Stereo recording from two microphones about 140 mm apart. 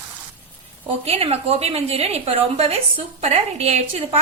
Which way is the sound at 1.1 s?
45° right (ahead or behind).